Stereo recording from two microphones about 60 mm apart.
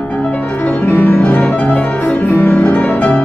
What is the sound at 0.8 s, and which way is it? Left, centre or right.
Music, left.